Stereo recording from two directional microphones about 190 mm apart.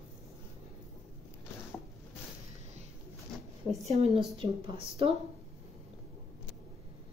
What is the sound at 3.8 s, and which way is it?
A woman's voice, 35° right (ahead or behind).